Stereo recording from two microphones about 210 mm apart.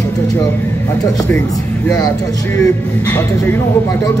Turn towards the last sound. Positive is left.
turn(degrees=15)  # may be behind; listen again after turning